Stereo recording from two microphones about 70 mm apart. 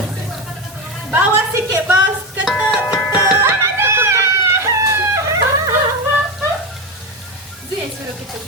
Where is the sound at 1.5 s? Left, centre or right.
Right.